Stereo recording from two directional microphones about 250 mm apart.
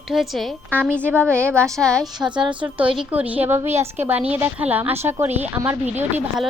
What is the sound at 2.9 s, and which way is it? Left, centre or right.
A woman's voice, centre.